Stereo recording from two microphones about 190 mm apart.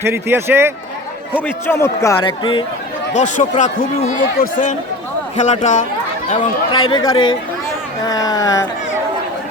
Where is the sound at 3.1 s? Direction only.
40° left (ahead or behind).